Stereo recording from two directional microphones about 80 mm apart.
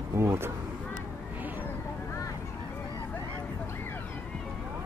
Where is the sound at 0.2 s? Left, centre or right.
Right.